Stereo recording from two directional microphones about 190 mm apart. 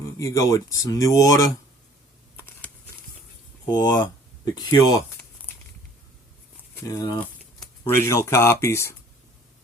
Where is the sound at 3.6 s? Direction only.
20° left (ahead or behind).